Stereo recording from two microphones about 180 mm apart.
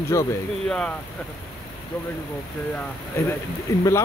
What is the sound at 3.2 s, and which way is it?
Speech, 15° left (ahead or behind).